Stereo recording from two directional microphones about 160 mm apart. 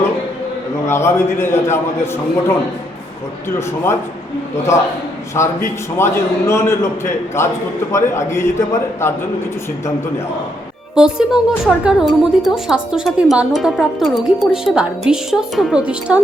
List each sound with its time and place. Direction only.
0.9 s a man's voice: 15° left (ahead or behind)
5.3 s a man's voice: 15° left (ahead or behind)
10.9 s a woman's voice: 5° right (ahead or behind)